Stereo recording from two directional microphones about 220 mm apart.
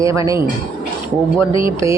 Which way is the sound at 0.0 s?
15° right (ahead or behind).